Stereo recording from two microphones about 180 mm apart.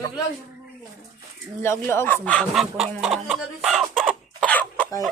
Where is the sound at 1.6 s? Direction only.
15° left (ahead or behind).